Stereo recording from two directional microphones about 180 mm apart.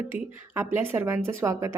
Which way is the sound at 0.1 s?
15° right (ahead or behind).